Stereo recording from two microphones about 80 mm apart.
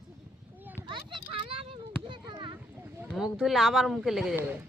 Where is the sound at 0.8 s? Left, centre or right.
Right.